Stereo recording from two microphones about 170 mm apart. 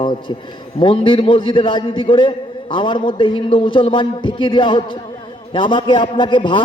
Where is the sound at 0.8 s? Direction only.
30° left (ahead or behind).